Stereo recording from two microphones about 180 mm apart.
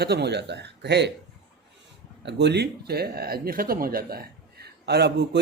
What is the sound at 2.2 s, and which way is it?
A man's voice, 70° right (ahead or behind).